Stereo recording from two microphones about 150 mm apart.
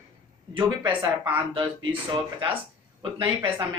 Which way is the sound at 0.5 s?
30° right (ahead or behind).